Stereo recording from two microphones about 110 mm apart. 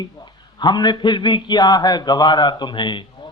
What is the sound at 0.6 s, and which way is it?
A man's voice, 40° left (ahead or behind).